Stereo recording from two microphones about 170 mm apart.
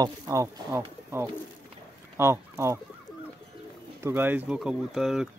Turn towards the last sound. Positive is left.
turn(degrees=0)  # may be behind; listen again after turning